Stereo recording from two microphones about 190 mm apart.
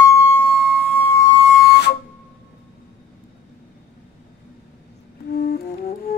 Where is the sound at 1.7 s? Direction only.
60° left (ahead or behind).